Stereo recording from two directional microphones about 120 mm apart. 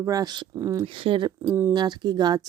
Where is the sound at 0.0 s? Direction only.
30° right (ahead or behind).